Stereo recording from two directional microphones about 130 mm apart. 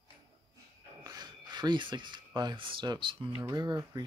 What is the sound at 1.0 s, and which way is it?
Speech, 30° right (ahead or behind).